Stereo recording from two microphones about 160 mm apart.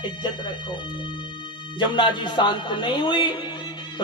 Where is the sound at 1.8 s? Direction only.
30° left (ahead or behind).